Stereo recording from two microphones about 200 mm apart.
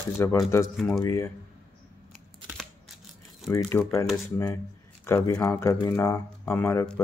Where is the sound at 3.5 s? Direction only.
15° left (ahead or behind).